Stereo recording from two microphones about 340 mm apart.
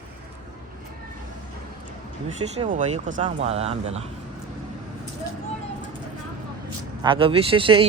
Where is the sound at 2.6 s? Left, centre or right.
Right.